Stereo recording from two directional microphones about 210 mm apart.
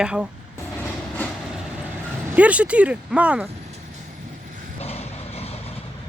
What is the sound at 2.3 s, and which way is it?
Speech, 5° right (ahead or behind).